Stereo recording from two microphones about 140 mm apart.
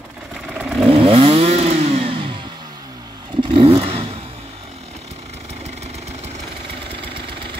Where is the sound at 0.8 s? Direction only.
40° right (ahead or behind).